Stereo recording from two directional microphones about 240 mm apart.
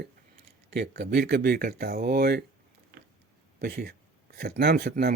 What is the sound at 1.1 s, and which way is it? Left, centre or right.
Speech, right.